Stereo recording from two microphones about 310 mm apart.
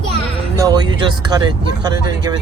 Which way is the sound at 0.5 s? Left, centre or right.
Centre.